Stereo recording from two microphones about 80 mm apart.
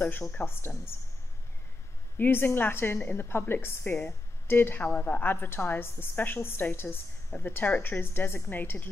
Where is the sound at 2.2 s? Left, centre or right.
Left.